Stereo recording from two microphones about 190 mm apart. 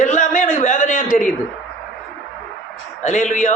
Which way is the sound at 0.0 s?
40° left (ahead or behind).